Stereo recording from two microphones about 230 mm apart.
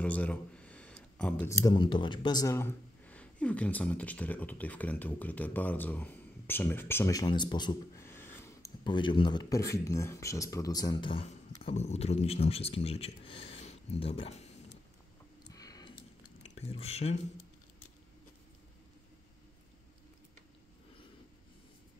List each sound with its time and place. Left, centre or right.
0.0 s speech: centre; by 14.5 s left
15.5 s a sound: centre
16.5 s speech: left